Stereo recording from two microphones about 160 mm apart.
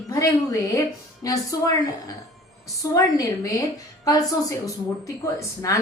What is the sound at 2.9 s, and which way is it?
A woman's voice, 20° left (ahead or behind).